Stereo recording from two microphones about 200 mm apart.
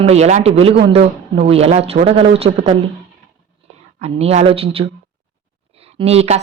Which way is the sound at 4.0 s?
30° right (ahead or behind).